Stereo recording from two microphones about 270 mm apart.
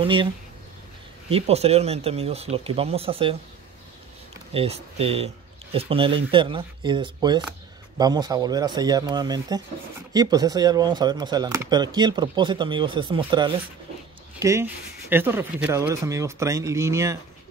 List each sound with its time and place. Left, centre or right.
0.0 s speech: centre
1.3 s speech: right
4.6 s speech: right